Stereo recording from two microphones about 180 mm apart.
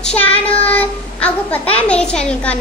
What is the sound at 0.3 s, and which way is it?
Child singing, 30° left (ahead or behind).